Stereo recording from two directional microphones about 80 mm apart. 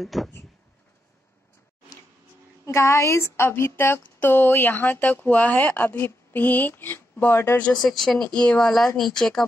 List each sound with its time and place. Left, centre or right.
0.0 s speech: centre
2.6 s speech: left
7.8 s speech: centre